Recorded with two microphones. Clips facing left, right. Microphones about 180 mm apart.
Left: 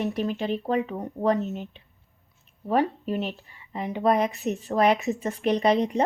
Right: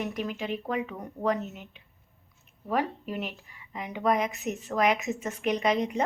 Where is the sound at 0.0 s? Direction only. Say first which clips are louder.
Left 5 dB; 30° left (ahead or behind).